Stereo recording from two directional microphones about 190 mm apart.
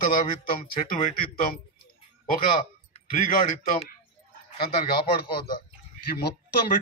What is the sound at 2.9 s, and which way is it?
Speech, 35° left (ahead or behind).